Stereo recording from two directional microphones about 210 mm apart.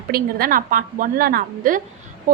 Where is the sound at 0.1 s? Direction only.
45° right (ahead or behind).